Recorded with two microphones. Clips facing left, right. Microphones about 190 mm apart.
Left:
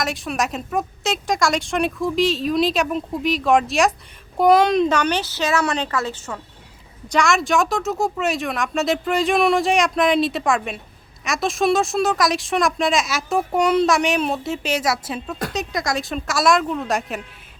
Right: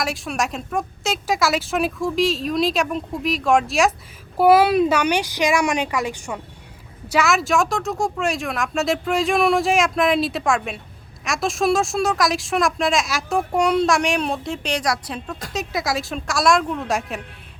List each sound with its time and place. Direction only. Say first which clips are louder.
0.0 s a woman's voice: left 1 dB; centre (ahead or behind)